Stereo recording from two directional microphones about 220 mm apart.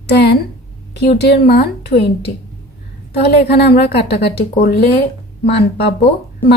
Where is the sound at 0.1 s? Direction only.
50° left (ahead or behind).